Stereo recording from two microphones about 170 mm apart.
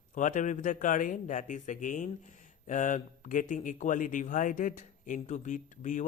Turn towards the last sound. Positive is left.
turn(degrees=45)  # may be behind; listen again after turning